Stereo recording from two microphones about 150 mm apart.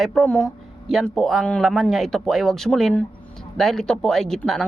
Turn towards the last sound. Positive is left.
turn(degrees=5)  # may be behind; listen again after turning